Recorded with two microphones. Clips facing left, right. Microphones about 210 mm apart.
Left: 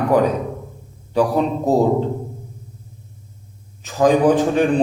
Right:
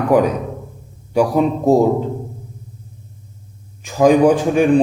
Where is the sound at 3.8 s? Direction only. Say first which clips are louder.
Right 3 dB; 10° right (ahead or behind).